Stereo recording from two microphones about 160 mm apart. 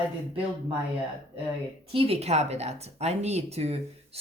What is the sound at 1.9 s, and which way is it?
Speech, 40° right (ahead or behind).